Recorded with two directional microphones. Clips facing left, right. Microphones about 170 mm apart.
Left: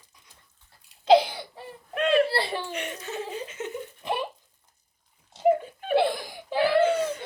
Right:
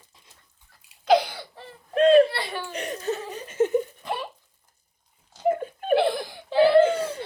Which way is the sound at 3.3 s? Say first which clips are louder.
Right 10 dB; 40° right (ahead or behind).